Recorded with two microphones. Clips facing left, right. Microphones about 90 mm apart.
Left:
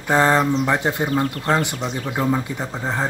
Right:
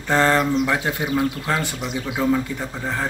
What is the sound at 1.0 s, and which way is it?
Speech, centre (ahead or behind).